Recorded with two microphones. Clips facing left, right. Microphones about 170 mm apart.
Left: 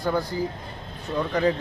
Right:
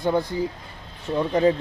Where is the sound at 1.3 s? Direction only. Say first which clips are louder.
Right 4 dB; 25° right (ahead or behind).